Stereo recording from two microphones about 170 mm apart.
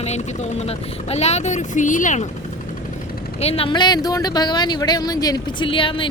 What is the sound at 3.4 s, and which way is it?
Speech, 35° left (ahead or behind).